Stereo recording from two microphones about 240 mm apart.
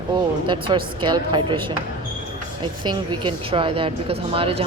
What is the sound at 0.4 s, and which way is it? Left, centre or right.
Speech, centre.